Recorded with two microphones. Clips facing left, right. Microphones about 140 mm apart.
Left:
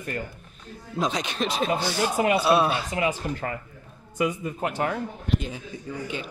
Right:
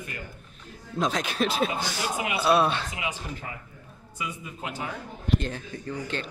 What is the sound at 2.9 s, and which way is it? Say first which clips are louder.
Speech: left 8 dB; 45° left (ahead or behind).